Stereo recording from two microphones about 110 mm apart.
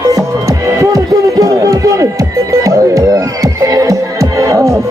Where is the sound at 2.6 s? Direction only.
30° right (ahead or behind).